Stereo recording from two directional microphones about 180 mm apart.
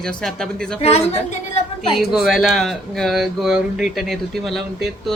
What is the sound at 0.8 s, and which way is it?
Speech, 35° left (ahead or behind).